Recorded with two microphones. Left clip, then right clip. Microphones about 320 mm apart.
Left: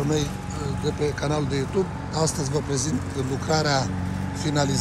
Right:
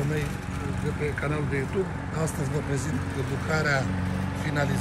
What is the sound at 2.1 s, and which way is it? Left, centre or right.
Speech, centre.